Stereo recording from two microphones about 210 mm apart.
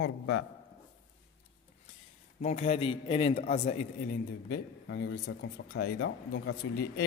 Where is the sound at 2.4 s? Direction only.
30° left (ahead or behind).